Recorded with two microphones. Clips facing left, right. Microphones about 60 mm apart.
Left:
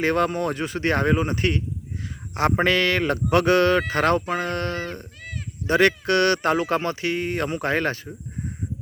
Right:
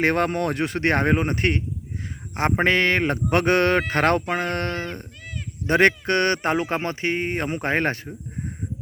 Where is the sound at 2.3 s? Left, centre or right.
Right.